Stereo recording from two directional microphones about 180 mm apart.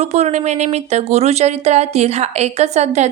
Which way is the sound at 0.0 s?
40° right (ahead or behind).